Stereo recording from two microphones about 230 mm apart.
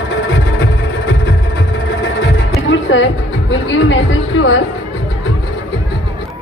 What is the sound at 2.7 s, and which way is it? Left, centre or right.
Music, left.